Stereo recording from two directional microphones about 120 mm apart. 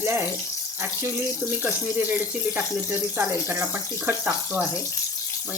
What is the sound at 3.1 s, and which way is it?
Speech, 20° right (ahead or behind).